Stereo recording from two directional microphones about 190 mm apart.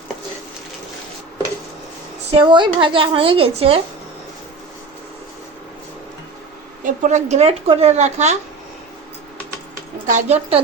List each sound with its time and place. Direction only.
2.3 s a woman's voice: 25° right (ahead or behind)
6.8 s speech: 40° right (ahead or behind)
10.1 s speech: 35° right (ahead or behind)